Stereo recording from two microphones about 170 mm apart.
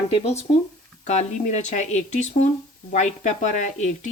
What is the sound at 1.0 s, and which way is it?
Speech, 40° left (ahead or behind).